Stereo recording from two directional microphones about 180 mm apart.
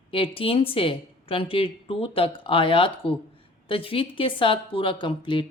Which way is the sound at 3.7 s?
30° left (ahead or behind).